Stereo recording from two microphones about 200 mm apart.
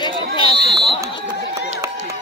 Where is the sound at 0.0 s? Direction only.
25° left (ahead or behind).